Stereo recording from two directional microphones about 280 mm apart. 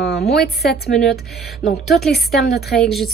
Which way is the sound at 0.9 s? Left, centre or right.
Centre.